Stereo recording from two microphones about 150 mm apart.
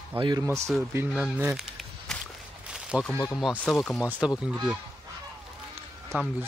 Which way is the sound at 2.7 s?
5° right (ahead or behind).